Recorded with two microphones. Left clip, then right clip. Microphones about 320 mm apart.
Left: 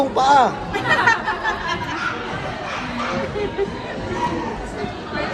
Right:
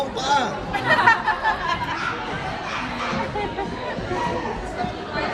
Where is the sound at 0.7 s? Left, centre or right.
Right.